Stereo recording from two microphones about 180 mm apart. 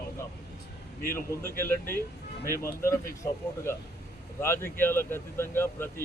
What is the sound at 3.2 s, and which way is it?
Speech, 15° left (ahead or behind).